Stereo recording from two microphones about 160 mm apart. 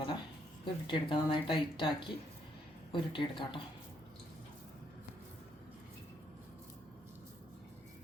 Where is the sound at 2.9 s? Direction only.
30° left (ahead or behind).